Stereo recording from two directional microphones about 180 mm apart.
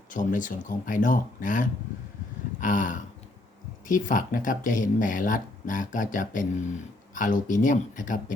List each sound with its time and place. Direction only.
0.1 s speech: 45° left (ahead or behind)
2.6 s a sound: 45° left (ahead or behind)
3.8 s speech: 45° left (ahead or behind)